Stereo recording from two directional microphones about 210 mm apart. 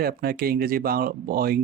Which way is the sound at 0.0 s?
45° right (ahead or behind).